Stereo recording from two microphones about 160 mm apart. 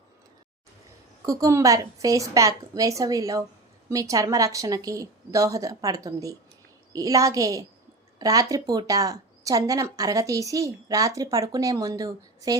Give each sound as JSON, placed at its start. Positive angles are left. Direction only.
{"t": 1.2, "sound": "speech", "side_deg": -20}